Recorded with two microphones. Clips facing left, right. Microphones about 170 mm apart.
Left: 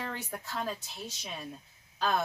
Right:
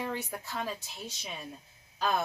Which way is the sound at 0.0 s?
5° right (ahead or behind).